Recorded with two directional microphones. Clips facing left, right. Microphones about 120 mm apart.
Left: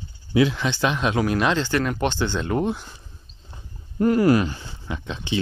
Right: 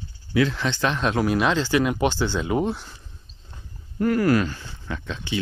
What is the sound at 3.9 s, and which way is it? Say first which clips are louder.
Speech: left 2 dB; 20° left (ahead or behind).